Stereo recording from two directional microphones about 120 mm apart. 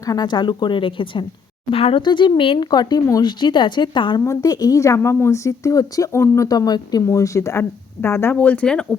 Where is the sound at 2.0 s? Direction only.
40° left (ahead or behind).